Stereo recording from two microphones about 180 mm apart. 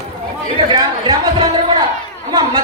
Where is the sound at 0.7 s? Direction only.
25° right (ahead or behind).